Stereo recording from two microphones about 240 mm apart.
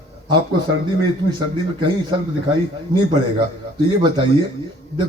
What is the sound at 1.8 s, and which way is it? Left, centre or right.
A man's voice, centre.